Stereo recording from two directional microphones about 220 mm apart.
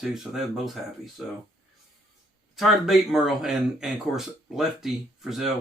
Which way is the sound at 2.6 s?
Centre (ahead or behind).